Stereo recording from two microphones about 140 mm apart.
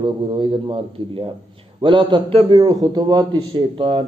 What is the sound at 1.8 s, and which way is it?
Speech, 35° right (ahead or behind).